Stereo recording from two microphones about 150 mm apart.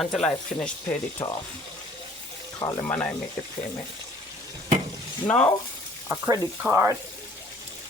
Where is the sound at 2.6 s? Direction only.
20° left (ahead or behind).